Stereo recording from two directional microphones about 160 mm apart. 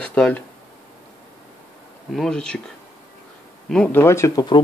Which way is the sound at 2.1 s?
5° left (ahead or behind).